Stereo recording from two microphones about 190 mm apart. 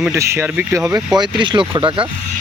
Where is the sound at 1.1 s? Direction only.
25° right (ahead or behind).